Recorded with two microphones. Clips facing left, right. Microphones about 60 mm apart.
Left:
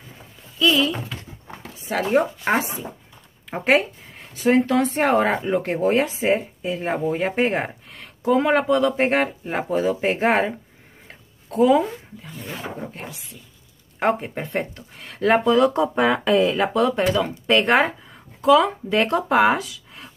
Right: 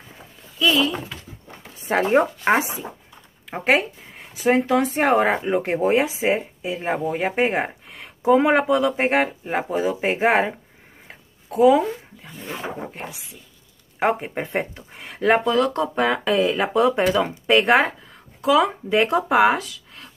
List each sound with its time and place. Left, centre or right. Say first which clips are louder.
0.2 s a sound: left 1 dB; centre
1.9 s speech: right 2 dB; right
3.4 s speech: left 1 dB; centre
11.1 s dog: right 2 dB; centre
12.4 s speech: right 2 dB; right
15.3 s speech: left 4 dB; centre